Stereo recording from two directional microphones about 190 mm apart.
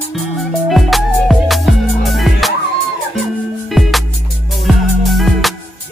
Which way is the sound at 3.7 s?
Centre (ahead or behind).